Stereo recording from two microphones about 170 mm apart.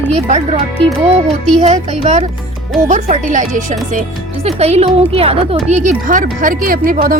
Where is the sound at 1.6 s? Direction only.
40° right (ahead or behind).